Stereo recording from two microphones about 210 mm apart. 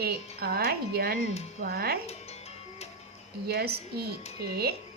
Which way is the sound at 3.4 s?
50° right (ahead or behind).